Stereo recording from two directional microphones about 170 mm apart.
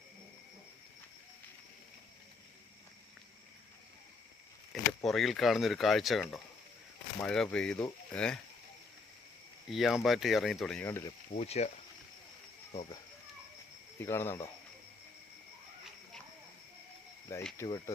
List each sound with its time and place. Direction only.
5.0 s speech: centre (ahead or behind)
9.6 s speech: centre (ahead or behind); by 11.1 s 15° left (ahead or behind)
11.3 s speech: 40° left (ahead or behind)
14.0 s speech: 15° left (ahead or behind)
17.3 s speech: 15° left (ahead or behind)